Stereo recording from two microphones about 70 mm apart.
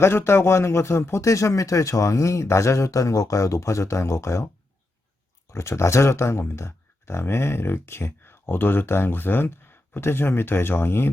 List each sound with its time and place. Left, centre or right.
0.0 s speech: left
5.5 s speech: left